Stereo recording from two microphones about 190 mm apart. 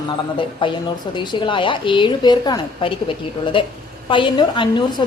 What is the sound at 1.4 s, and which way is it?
A woman's voice, 25° left (ahead or behind).